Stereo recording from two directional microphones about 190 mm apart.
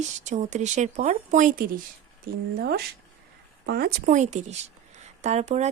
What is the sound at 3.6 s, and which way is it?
Speech, 55° right (ahead or behind).